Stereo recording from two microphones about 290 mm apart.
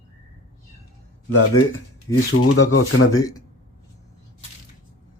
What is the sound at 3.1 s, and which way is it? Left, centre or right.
Speech, centre.